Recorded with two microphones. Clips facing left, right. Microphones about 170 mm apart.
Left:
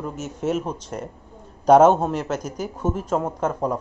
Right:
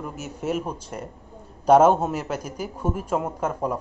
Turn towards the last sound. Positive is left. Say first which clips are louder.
# left 2 dB
turn(degrees=-10)  # may be behind; listen again after turning